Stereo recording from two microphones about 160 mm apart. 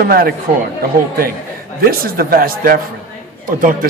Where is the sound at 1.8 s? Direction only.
65° right (ahead or behind).